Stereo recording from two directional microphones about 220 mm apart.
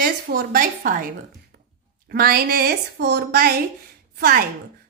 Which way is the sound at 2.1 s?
45° right (ahead or behind).